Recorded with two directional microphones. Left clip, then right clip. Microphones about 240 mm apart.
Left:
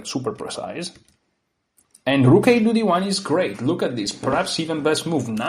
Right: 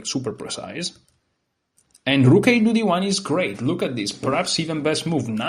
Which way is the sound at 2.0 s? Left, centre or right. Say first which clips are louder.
Left 1 dB; right.